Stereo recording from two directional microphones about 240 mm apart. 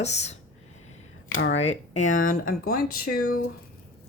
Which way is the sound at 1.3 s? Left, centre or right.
Left.